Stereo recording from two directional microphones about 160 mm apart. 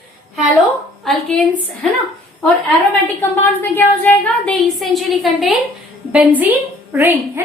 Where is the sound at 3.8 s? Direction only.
10° left (ahead or behind).